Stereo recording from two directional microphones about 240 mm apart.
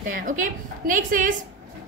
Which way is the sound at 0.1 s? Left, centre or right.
Right.